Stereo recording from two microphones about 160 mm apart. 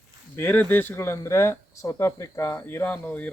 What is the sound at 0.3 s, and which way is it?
A man's voice, 15° left (ahead or behind).